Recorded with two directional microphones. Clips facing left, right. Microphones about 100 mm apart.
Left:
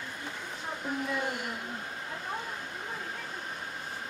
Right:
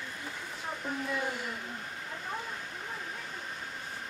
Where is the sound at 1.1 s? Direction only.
5° left (ahead or behind).